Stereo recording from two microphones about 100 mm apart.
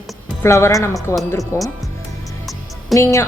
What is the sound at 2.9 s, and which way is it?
Speech, 30° left (ahead or behind).